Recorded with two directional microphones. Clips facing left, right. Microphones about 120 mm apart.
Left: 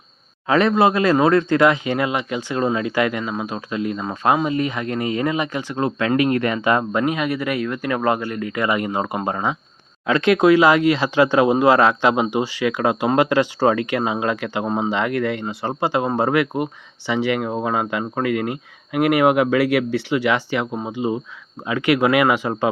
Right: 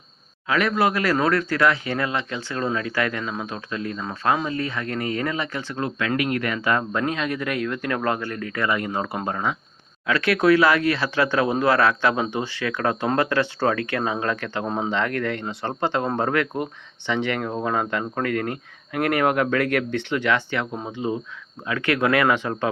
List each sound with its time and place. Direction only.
0.4 s speech: 30° left (ahead or behind); by 22.7 s 10° left (ahead or behind)